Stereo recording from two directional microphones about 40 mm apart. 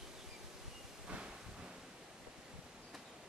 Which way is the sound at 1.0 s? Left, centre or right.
Right.